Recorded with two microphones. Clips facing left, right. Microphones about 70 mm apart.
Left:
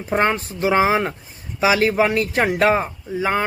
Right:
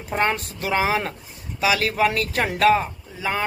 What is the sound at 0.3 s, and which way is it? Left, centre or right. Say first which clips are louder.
Speech: left 6 dB; left.